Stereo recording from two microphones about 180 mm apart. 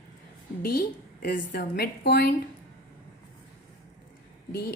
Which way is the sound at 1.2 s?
50° left (ahead or behind).